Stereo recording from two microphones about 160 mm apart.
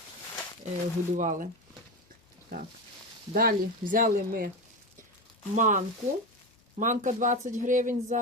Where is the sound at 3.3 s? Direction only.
65° right (ahead or behind).